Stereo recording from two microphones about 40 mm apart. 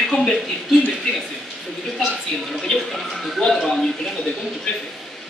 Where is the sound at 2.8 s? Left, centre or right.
Centre.